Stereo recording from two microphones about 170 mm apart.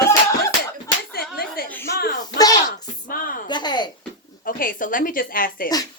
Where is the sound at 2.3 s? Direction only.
20° left (ahead or behind).